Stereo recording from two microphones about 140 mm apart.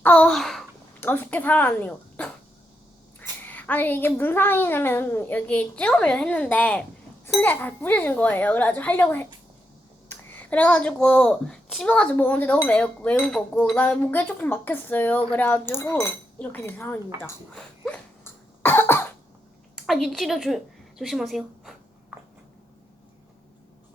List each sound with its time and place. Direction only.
0.0 s a child's voice: 10° left (ahead or behind)
1.0 s a child's voice: 15° left (ahead or behind)
17.5 s cough: 5° left (ahead or behind)
19.7 s a woman's voice: centre (ahead or behind)